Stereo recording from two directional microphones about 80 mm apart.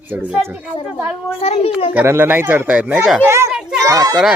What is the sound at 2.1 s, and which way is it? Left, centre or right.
Speech, right.